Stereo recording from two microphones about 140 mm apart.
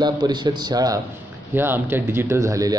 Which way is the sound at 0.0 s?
30° right (ahead or behind).